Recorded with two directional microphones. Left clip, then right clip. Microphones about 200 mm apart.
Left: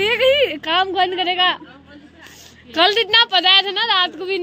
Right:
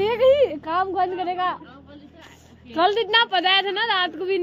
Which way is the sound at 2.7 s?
Centre (ahead or behind).